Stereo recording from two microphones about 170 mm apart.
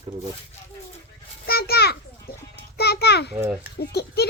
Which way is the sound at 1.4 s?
65° left (ahead or behind).